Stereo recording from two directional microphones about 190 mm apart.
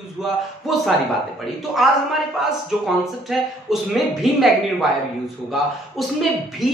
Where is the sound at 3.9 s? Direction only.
Centre (ahead or behind).